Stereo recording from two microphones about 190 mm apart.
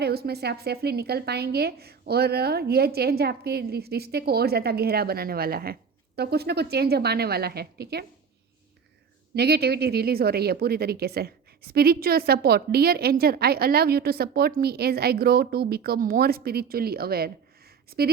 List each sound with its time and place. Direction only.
0.0 s speech: 55° right (ahead or behind)
9.3 s speech: 55° right (ahead or behind)